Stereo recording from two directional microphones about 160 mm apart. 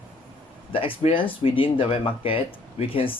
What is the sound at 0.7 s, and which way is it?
Speech, 35° left (ahead or behind).